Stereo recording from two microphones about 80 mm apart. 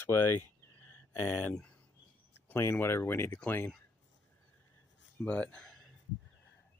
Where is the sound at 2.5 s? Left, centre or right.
Left.